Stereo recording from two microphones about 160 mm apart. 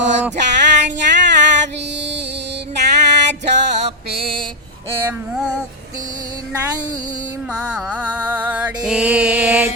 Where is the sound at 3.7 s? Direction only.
40° right (ahead or behind).